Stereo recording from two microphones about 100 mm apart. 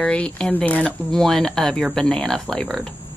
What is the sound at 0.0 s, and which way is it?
Speech, 10° left (ahead or behind).